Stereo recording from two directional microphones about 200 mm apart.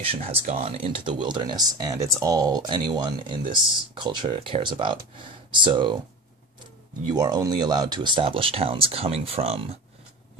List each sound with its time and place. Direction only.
0.0 s speech: 30° right (ahead or behind)
7.1 s speech: 20° right (ahead or behind)